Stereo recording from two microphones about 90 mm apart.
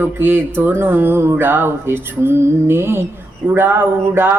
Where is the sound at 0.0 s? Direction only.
25° right (ahead or behind).